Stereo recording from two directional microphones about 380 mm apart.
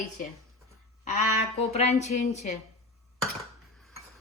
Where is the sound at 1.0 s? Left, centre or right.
Centre.